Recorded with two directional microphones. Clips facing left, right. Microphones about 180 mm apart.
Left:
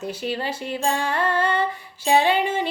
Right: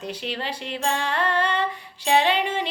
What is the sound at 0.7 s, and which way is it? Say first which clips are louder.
Music: left 2 dB; 5° left (ahead or behind).